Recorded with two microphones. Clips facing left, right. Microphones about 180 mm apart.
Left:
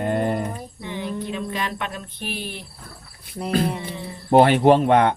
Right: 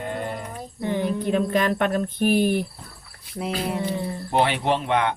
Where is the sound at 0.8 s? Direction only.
50° right (ahead or behind).